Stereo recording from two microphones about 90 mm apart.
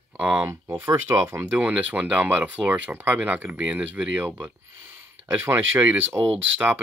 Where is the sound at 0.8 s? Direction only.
35° right (ahead or behind).